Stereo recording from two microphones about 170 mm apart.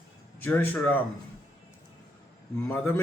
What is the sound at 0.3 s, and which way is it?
Speech, 10° left (ahead or behind).